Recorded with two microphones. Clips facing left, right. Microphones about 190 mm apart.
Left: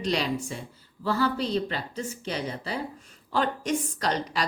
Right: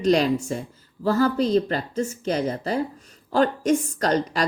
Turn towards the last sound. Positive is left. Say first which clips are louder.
# right 6 dB
turn(degrees=-45)  # may be behind; listen again after turning